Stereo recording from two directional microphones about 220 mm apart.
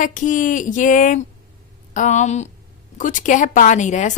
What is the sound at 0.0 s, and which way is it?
A woman's voice, 35° left (ahead or behind).